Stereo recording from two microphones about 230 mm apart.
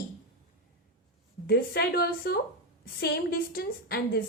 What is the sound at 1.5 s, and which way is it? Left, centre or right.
A woman's voice, left.